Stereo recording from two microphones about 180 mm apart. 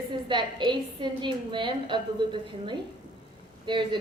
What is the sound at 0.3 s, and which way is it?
A woman's voice, 25° right (ahead or behind).